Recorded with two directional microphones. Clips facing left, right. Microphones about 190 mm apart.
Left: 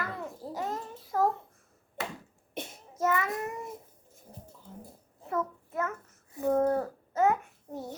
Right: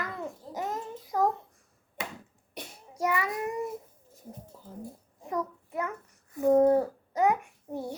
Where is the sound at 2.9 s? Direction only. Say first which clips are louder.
Left 1 dB; 15° right (ahead or behind).